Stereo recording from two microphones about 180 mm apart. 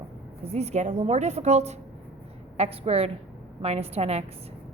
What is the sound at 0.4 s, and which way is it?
A woman's voice, 35° right (ahead or behind).